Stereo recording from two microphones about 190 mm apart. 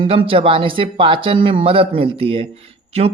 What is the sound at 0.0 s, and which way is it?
Speech, 30° right (ahead or behind).